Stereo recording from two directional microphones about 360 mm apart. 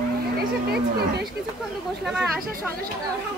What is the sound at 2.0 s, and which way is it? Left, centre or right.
Speech, centre.